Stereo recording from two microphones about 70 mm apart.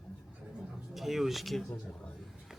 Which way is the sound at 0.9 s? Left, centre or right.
Centre.